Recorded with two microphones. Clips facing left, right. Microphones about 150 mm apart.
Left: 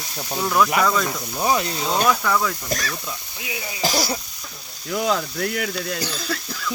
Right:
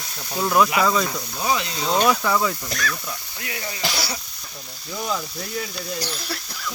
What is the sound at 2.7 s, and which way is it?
Speech, 35° left (ahead or behind).